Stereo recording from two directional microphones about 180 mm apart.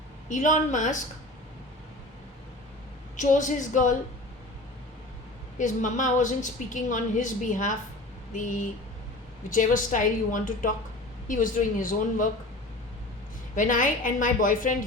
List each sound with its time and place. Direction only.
0.3 s a woman's voice: 45° left (ahead or behind)
3.2 s a woman's voice: 45° left (ahead or behind)
5.5 s a woman's voice: 45° left (ahead or behind)
13.6 s a woman's voice: 45° left (ahead or behind)